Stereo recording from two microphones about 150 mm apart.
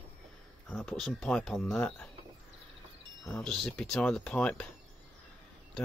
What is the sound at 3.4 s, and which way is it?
Speech, 5° left (ahead or behind).